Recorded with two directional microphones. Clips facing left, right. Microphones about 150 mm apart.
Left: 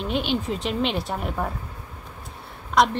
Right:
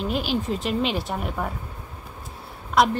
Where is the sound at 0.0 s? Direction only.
Centre (ahead or behind).